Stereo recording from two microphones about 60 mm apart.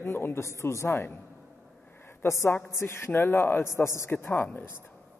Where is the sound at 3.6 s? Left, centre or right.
Left.